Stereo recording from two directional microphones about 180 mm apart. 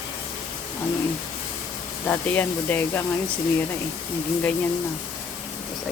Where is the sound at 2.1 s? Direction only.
10° left (ahead or behind).